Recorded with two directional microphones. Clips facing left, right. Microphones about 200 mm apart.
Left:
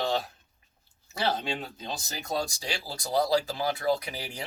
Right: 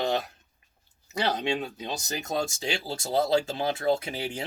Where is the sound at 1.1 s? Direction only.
20° right (ahead or behind).